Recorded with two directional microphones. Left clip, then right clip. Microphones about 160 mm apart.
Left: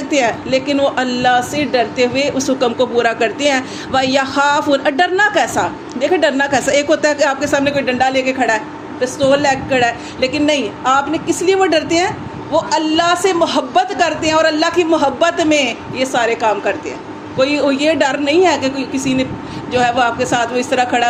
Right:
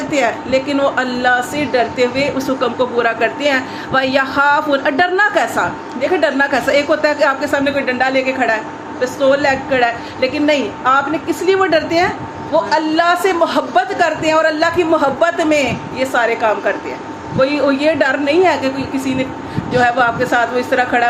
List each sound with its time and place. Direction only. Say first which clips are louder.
0.1 s a woman's voice: left 1 dB; 45° left (ahead or behind)